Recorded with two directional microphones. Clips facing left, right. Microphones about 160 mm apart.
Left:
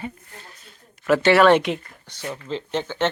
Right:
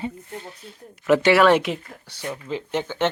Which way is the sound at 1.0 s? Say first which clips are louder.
Even; 10° right (ahead or behind).